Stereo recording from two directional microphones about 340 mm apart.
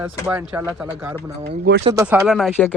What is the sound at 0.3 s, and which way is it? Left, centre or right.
Speech, centre.